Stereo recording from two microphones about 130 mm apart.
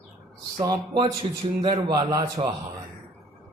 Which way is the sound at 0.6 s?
30° right (ahead or behind).